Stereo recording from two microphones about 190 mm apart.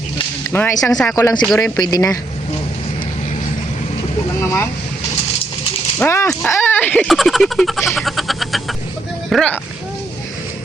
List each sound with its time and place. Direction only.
0.5 s speech: 10° left (ahead or behind)
1.1 s speech: 20° left (ahead or behind)
4.4 s vehicle: 15° left (ahead or behind)
6.0 s speech: 15° left (ahead or behind)